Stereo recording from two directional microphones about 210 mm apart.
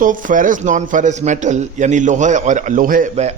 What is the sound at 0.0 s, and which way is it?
A man's voice, 40° right (ahead or behind).